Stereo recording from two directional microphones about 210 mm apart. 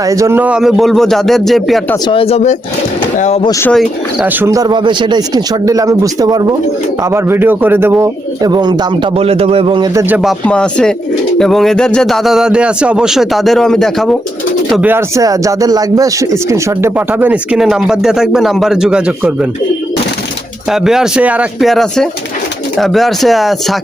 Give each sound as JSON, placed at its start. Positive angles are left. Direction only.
{"t": 0.0, "sound": "speech", "side_deg": -15}
{"t": 2.0, "sound": "speech", "side_deg": 25}
{"t": 3.4, "sound": "speech", "side_deg": 15}
{"t": 3.7, "sound": "speech", "side_deg": 0}
{"t": 10.2, "sound": "speech", "side_deg": 0}
{"t": 20.7, "sound": "speech", "side_deg": 0}